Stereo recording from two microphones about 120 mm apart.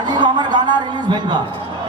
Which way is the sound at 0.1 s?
40° right (ahead or behind).